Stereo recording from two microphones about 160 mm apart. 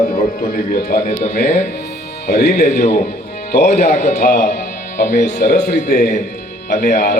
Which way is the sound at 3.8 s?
50° left (ahead or behind).